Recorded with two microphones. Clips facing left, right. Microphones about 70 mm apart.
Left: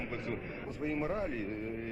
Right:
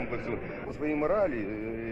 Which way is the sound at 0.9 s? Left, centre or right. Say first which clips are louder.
Right 9 dB; right.